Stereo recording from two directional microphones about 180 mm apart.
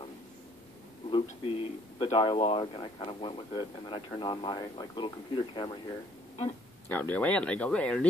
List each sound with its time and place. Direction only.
1.1 s speech: 30° left (ahead or behind)
6.9 s speech: 10° left (ahead or behind)